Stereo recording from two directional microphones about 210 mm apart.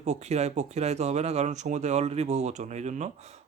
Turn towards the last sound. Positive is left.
turn(degrees=-30)  # may be behind; listen again after turning